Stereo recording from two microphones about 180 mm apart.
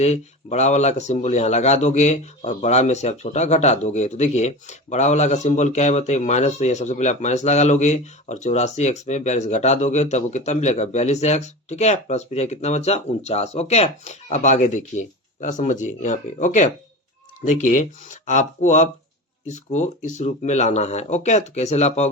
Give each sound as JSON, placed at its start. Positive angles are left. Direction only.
{"t": 0.0, "sound": "speech", "side_deg": 40}